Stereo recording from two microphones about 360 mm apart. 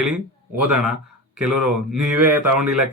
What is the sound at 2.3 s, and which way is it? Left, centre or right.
Speech, right.